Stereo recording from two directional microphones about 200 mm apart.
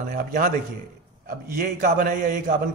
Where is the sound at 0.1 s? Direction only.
40° right (ahead or behind).